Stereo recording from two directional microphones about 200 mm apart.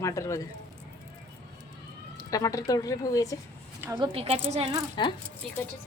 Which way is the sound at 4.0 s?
30° right (ahead or behind).